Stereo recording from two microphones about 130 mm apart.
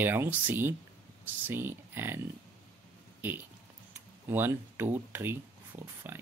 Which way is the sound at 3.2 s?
15° right (ahead or behind).